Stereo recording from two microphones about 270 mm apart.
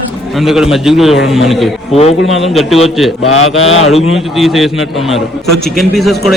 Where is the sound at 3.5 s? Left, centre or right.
Left.